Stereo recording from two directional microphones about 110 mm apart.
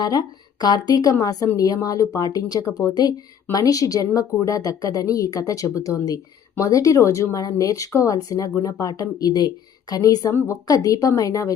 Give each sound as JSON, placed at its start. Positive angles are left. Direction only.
{"t": 0.0, "sound": "speech", "side_deg": 35}